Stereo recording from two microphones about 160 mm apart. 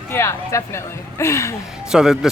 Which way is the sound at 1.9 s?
5° right (ahead or behind).